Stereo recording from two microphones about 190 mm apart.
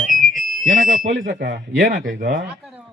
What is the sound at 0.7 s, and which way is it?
Speech, 45° right (ahead or behind).